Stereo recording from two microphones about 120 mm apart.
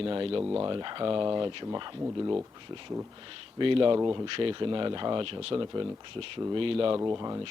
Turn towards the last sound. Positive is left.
turn(degrees=-30)  # may be behind; listen again after turning